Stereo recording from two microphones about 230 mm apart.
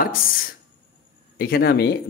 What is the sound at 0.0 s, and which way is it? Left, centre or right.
Speech, left.